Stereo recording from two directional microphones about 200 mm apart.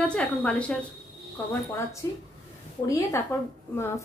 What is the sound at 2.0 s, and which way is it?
A woman's voice, 15° left (ahead or behind).